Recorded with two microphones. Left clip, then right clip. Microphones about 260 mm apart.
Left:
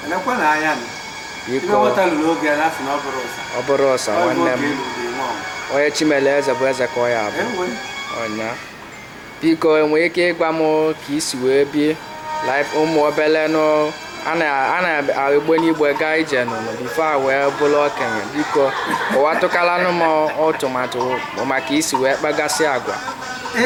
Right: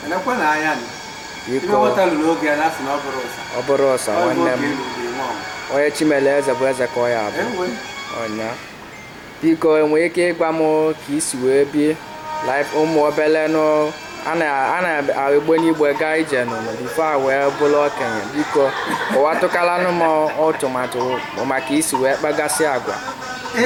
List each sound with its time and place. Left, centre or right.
0.1 s speech: centre
9.6 s speech: centre
10.6 s speech: right
11.4 s speech: centre
21.7 s speech: centre